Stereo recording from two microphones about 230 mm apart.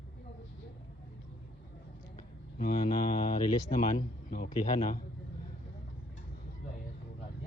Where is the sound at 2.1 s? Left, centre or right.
Left.